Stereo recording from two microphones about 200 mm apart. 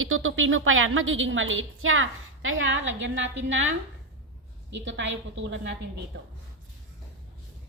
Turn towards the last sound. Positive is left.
turn(degrees=-55)  # may be behind; listen again after turning